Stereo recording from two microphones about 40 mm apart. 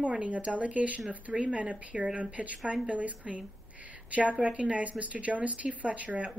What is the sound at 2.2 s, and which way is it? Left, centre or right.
A woman's voice, right.